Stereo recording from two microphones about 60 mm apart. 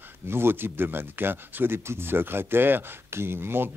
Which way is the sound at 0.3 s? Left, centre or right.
Right.